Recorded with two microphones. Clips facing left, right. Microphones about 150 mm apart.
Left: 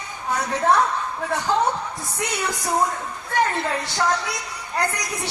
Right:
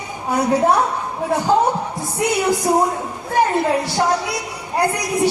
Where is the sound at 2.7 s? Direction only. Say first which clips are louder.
Right 6 dB; 25° right (ahead or behind).